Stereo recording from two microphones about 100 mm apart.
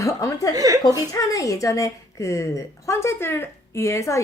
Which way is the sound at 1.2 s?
35° left (ahead or behind).